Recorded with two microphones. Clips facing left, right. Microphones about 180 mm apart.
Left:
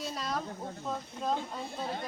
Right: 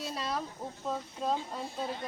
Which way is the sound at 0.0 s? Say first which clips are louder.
Even; 5° right (ahead or behind).